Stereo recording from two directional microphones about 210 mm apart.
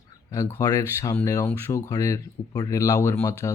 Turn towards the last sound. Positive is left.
turn(degrees=15)  # may be behind; listen again after turning